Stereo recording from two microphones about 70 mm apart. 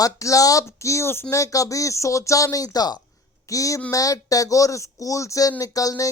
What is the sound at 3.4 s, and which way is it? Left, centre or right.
Speech, left.